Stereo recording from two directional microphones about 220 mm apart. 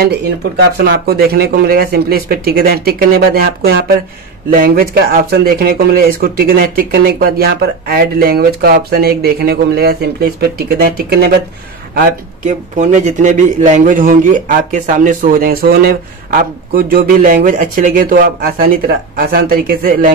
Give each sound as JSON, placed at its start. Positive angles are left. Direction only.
{"t": 0.7, "sound": "a man's voice", "side_deg": -50}